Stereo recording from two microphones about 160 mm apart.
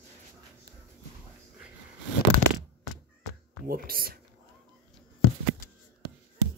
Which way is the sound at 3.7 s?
65° right (ahead or behind).